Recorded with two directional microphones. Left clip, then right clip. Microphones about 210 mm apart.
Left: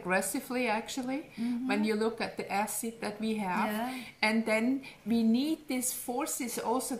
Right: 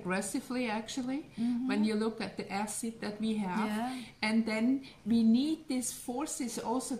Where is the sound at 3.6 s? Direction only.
15° right (ahead or behind).